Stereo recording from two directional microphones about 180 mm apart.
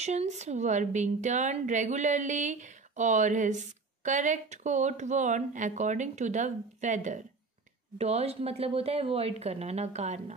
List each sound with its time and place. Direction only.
0.0 s a woman's voice: 40° right (ahead or behind)